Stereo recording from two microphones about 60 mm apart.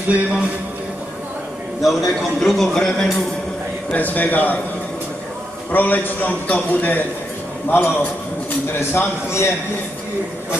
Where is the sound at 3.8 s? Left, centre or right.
Left.